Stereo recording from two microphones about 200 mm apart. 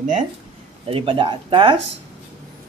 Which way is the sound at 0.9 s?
30° right (ahead or behind).